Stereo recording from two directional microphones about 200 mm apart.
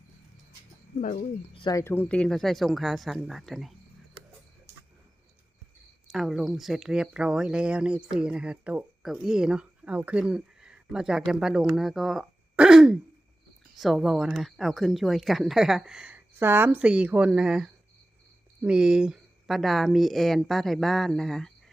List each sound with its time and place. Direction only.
1.0 s speech: 40° left (ahead or behind)
1.5 s speech: 20° left (ahead or behind); by 3.8 s centre (ahead or behind)
6.1 s speech: centre (ahead or behind)